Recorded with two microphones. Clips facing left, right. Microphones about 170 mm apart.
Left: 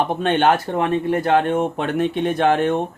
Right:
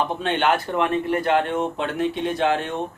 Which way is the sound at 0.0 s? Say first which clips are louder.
Left 4 dB; 50° left (ahead or behind).